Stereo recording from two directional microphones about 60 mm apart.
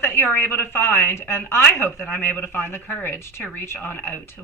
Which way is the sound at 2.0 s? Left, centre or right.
Left.